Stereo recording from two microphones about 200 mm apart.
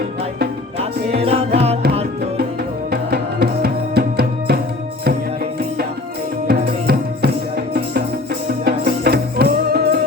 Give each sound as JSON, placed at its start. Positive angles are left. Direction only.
{"t": 0.8, "sound": "music", "side_deg": -30}
{"t": 2.9, "sound": "music", "side_deg": -50}
{"t": 6.5, "sound": "music", "side_deg": -50}
{"t": 8.6, "sound": "music", "side_deg": -50}